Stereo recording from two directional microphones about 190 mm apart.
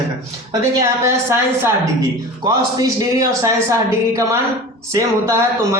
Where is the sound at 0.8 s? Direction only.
15° right (ahead or behind).